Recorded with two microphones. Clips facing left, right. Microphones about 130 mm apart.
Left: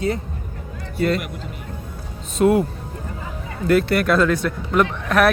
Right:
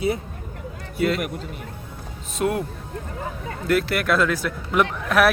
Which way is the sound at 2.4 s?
Centre (ahead or behind).